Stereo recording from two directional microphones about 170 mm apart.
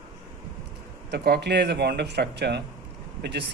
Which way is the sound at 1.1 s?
80° right.